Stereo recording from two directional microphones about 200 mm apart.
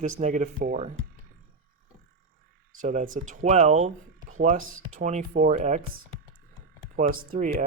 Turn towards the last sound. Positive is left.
turn(degrees=-40)  # may be behind; listen again after turning